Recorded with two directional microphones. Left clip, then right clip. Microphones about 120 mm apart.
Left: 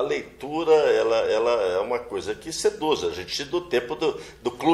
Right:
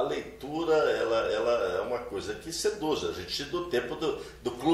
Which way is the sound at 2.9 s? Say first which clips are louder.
Left 6 dB; 15° left (ahead or behind).